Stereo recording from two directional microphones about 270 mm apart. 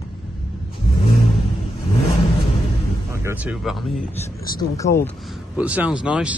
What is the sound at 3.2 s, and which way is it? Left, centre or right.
Speech, centre.